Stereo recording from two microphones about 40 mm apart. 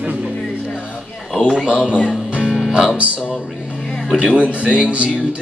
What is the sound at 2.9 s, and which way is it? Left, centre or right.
Speech, right.